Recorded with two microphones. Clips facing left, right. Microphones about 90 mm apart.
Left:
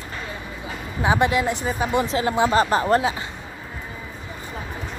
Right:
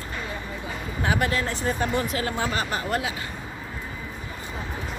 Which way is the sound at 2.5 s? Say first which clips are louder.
Left 9 dB; 35° left (ahead or behind).